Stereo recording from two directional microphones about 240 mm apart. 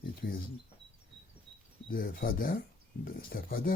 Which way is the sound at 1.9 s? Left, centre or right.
Left.